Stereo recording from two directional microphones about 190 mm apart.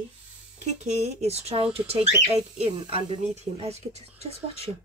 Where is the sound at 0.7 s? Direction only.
35° right (ahead or behind).